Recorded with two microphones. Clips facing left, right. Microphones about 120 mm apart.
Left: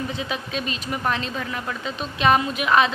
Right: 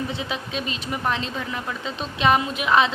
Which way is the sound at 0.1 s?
20° right (ahead or behind).